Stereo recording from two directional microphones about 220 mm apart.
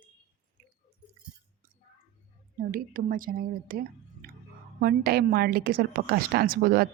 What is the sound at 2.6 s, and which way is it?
A woman's voice, 40° right (ahead or behind).